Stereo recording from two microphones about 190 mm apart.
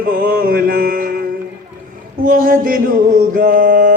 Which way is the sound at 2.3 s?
50° right (ahead or behind).